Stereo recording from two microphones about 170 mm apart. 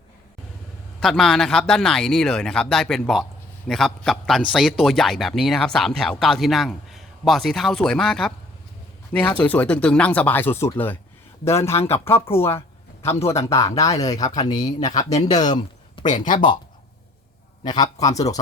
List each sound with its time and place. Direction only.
0.9 s speech: centre (ahead or behind)
12.3 s a sound: 15° left (ahead or behind)
13.2 s speech: 15° left (ahead or behind)
14.8 s speech: 40° left (ahead or behind)
17.6 s speech: 25° left (ahead or behind)